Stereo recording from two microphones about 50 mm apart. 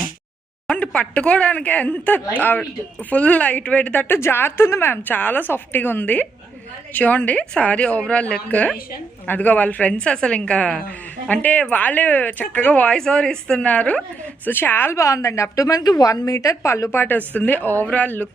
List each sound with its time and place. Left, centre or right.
0.8 s speech: left
4.1 s a woman's voice: left
5.0 s a woman's voice: left
8.4 s a woman's voice: left
13.0 s a woman's voice: centre
14.4 s a woman's voice: left
14.9 s a woman's voice: left
16.9 s a woman's voice: left
17.2 s speech: left